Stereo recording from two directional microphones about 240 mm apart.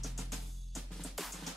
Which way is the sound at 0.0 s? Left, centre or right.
Centre.